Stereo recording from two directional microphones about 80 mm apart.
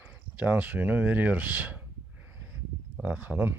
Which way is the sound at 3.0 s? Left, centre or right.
Centre.